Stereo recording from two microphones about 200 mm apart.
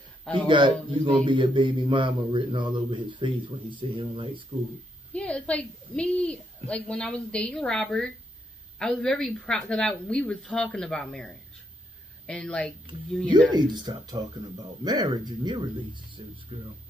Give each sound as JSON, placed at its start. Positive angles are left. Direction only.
{"t": 0.5, "sound": "speech", "side_deg": -25}
{"t": 5.1, "sound": "a woman's voice", "side_deg": 5}
{"t": 13.5, "sound": "speech", "side_deg": -20}